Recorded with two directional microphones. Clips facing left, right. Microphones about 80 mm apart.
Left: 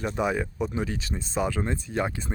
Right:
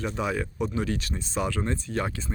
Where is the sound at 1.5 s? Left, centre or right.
Centre.